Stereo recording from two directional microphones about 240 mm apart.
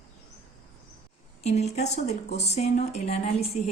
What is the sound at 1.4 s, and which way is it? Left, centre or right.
A woman's voice, left.